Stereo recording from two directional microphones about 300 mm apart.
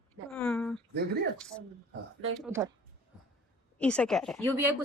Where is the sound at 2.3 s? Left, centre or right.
Centre.